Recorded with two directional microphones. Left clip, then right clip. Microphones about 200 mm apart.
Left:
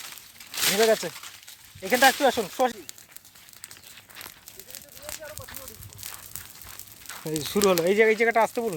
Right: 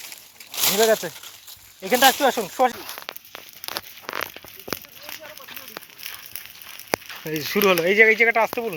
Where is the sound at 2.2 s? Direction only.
15° right (ahead or behind).